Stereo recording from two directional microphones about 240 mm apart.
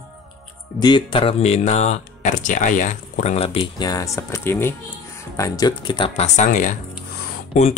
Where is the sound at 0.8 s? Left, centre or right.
Centre.